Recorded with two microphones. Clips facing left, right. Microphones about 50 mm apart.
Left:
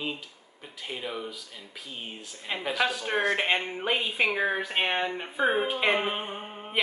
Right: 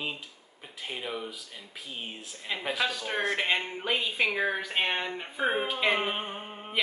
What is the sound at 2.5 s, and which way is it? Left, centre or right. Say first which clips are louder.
A woman's voice: left 2 dB; centre.